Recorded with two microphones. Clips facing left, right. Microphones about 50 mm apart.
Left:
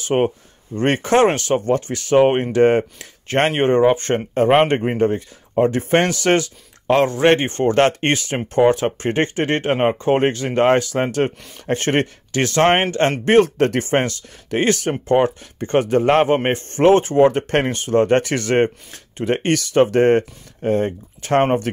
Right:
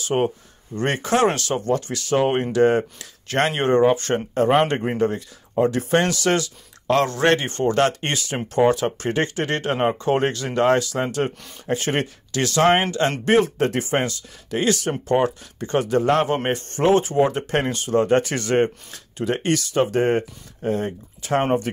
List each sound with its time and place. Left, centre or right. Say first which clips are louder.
0.0 s speech: left 3 dB; left
3.5 s speech: left 2 dB; left
5.6 s speech: left 3 dB; left
11.6 s speech: left 4 dB; left